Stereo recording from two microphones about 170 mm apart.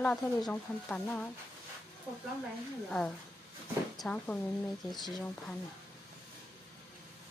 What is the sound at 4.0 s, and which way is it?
Speech, 10° left (ahead or behind).